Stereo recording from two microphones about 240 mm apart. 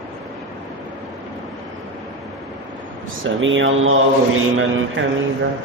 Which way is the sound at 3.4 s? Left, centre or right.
Right.